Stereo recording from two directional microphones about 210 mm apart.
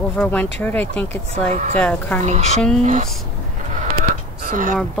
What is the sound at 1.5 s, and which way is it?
Speech, 35° right (ahead or behind).